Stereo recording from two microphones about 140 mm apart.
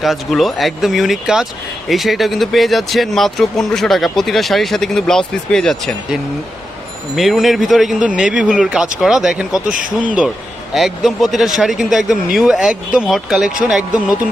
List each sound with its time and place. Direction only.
0.0 s speech: centre (ahead or behind)
7.2 s speech: centre (ahead or behind)
9.7 s speech: 75° right (ahead or behind)
9.9 s speech: 5° right (ahead or behind)